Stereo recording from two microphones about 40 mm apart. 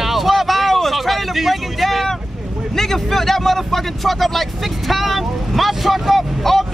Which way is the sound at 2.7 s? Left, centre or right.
Centre.